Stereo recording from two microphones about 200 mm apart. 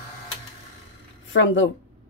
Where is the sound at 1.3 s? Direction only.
70° left (ahead or behind).